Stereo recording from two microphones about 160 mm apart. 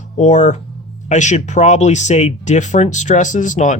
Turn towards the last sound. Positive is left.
turn(degrees=50)  # may be behind; listen again after turning